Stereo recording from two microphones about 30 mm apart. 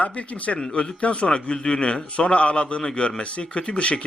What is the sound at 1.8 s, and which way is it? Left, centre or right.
A man's voice, left.